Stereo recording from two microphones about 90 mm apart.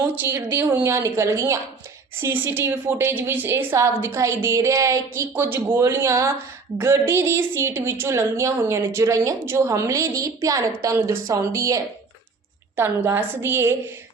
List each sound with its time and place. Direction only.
0.4 s a woman's voice: 25° right (ahead or behind)